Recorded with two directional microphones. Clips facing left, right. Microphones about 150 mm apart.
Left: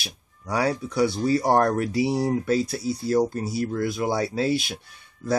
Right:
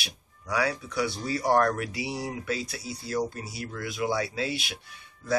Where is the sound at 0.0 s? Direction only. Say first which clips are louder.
Left 3 dB; 40° left (ahead or behind).